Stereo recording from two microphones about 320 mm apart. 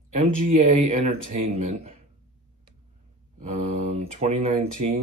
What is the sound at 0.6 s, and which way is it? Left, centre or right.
Speech, right.